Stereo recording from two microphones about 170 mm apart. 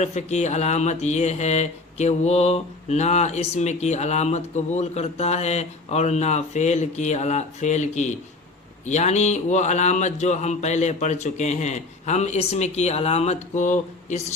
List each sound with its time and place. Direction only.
0.0 s speech: 40° left (ahead or behind)